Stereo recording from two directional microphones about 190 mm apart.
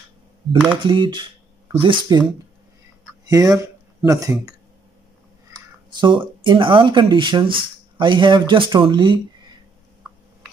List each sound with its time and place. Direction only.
0.8 s speech: 25° right (ahead or behind)
3.3 s speech: 20° right (ahead or behind)
5.9 s speech: 25° right (ahead or behind)